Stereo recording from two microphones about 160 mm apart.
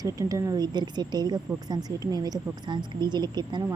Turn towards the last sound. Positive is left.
turn(degrees=-25)  # may be behind; listen again after turning